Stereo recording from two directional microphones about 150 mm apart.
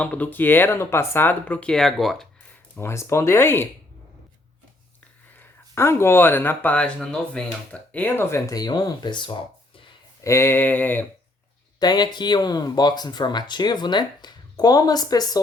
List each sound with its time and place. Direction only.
0.0 s speech: 10° left (ahead or behind)
2.7 s speech: 15° left (ahead or behind)
5.4 s speech: 15° left (ahead or behind)
10.2 s speech: 20° left (ahead or behind)
11.8 s speech: 30° left (ahead or behind)